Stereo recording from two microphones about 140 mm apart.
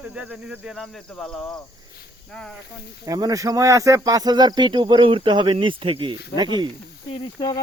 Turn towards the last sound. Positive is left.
turn(degrees=30)  # may be behind; listen again after turning